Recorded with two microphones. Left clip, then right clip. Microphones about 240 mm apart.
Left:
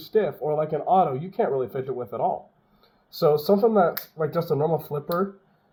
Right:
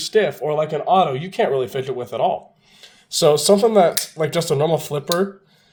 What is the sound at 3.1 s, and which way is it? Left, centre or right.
Speech, right.